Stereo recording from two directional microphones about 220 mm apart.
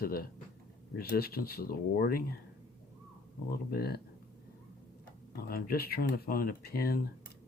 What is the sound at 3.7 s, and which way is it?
Speech, 45° left (ahead or behind).